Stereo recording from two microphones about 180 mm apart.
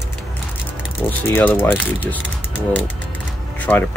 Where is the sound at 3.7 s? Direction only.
10° left (ahead or behind).